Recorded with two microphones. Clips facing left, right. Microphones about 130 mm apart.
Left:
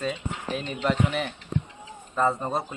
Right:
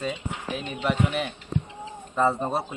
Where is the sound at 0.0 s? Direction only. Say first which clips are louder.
Even; 5° right (ahead or behind).